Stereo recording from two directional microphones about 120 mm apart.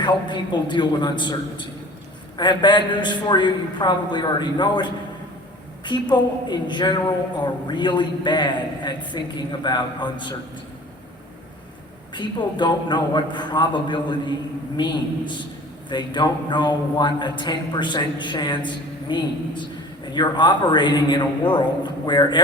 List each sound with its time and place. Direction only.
0.0 s a man's voice: 40° left (ahead or behind)
12.1 s a man's voice: 40° left (ahead or behind)